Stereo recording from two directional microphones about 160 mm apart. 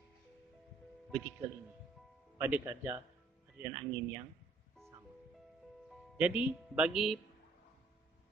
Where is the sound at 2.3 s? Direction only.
10° right (ahead or behind).